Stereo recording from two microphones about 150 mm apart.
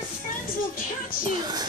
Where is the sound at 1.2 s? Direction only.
30° right (ahead or behind).